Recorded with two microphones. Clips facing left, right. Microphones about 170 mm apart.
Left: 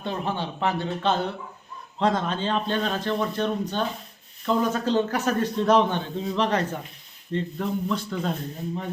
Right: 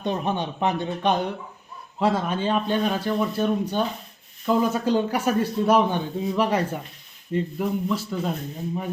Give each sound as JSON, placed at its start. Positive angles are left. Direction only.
{"t": 0.0, "sound": "a man's voice", "side_deg": -20}